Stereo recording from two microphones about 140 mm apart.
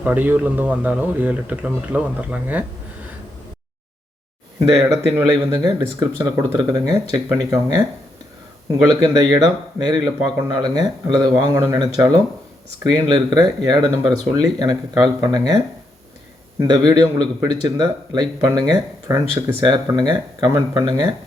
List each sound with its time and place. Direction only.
0.0 s speech: 10° right (ahead or behind)
4.8 s speech: centre (ahead or behind)
5.5 s a man's voice: 25° right (ahead or behind)
8.9 s a man's voice: 30° right (ahead or behind)